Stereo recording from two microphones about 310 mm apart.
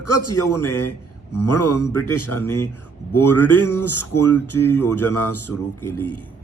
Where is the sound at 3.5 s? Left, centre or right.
Left.